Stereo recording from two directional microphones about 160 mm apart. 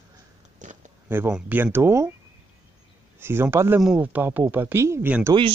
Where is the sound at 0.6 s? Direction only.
50° right (ahead or behind).